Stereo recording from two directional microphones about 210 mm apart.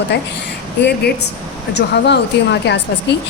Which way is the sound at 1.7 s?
55° left (ahead or behind).